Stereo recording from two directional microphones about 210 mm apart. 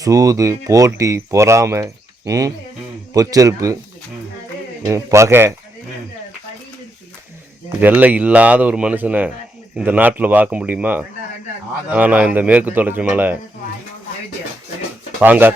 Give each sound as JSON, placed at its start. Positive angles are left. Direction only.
{"t": 0.0, "sound": "speech", "side_deg": -15}
{"t": 4.9, "sound": "speech", "side_deg": -15}
{"t": 7.8, "sound": "speech", "side_deg": -10}
{"t": 15.2, "sound": "speech", "side_deg": -10}